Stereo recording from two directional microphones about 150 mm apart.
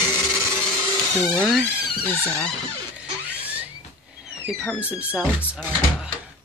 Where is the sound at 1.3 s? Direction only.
5° left (ahead or behind).